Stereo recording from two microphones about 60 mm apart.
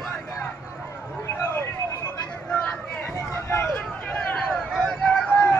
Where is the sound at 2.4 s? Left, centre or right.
Centre.